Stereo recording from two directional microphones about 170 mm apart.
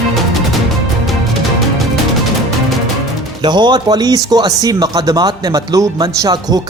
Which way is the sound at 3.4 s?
25° right (ahead or behind).